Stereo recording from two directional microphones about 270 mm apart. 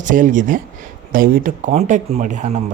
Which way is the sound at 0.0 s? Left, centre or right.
Right.